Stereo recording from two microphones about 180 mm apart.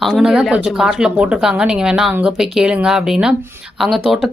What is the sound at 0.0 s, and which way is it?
Speech, centre (ahead or behind).